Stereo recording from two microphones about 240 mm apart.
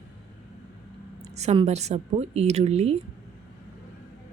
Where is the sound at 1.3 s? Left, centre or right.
Right.